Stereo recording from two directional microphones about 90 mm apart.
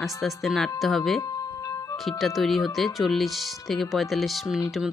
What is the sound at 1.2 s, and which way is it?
Music, 45° left (ahead or behind).